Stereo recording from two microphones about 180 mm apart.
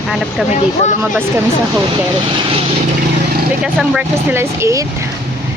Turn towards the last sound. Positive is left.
turn(degrees=-15)  # may be behind; listen again after turning